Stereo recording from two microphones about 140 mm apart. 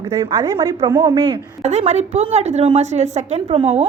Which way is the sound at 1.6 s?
50° right (ahead or behind).